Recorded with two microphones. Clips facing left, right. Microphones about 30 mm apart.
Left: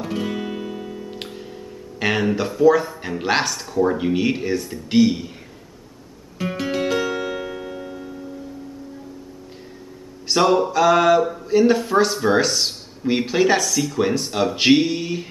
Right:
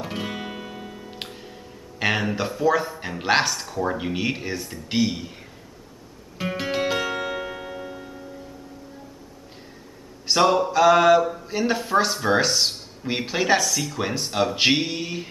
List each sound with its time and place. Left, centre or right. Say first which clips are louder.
0.0 s guitar: left 5 dB; centre
2.0 s speech: left 3 dB; centre
6.3 s music: left 2 dB; centre
10.2 s speech: left 2 dB; centre